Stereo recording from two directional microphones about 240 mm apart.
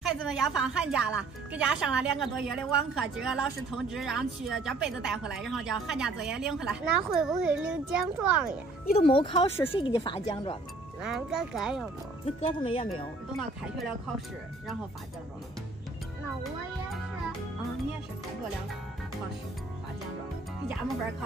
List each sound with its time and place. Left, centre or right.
0.0 s speech: centre
8.9 s speech: left
11.0 s speech: centre
12.4 s speech: left
13.4 s speech: centre